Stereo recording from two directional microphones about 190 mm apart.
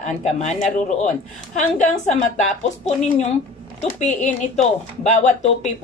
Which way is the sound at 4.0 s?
40° left (ahead or behind).